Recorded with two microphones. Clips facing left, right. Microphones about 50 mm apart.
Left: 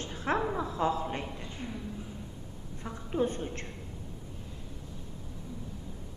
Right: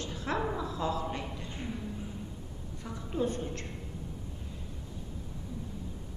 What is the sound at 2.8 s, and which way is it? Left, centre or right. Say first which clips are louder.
Speech: left 2 dB; left.